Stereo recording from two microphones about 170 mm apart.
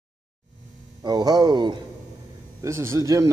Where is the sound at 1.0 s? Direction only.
25° right (ahead or behind).